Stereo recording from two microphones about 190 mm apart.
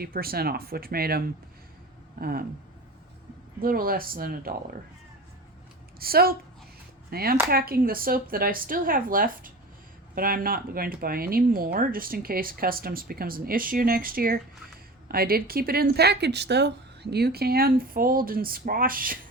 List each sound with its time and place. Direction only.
0.0 s speech: 50° right (ahead or behind)
2.1 s a sound: 50° right (ahead or behind)
3.6 s speech: 50° right (ahead or behind)
6.0 s speech: 50° right (ahead or behind)